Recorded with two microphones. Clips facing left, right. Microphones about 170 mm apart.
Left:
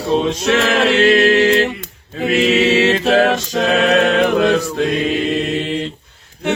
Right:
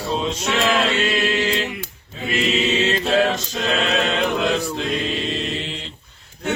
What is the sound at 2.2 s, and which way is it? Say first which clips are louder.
A capella: left 7 dB; 75° left (ahead or behind).